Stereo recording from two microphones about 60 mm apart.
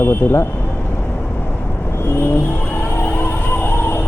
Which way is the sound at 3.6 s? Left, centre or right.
Left.